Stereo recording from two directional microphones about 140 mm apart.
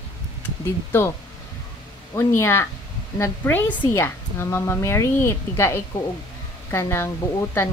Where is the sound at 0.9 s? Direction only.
15° left (ahead or behind).